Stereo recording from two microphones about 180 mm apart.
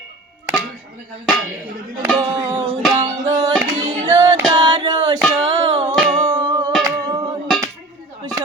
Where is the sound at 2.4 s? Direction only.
25° right (ahead or behind).